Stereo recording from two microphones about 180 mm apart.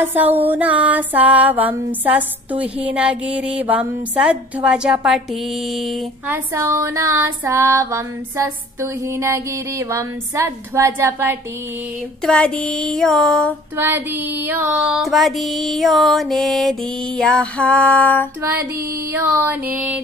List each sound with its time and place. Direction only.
0.0 s music: 10° right (ahead or behind)
6.2 s music: 15° right (ahead or behind)
12.2 s music: 5° left (ahead or behind)
13.7 s music: 15° right (ahead or behind); by 18.3 s 10° left (ahead or behind)
19.1 s music: 10° right (ahead or behind)